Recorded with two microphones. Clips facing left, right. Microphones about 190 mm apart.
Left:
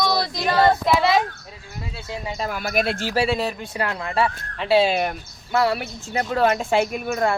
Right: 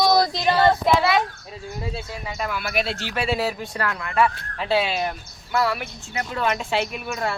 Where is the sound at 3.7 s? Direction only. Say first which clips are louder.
Left 1 dB; 20° left (ahead or behind).